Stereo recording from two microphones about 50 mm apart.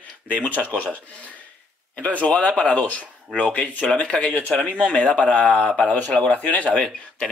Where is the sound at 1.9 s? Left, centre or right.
Left.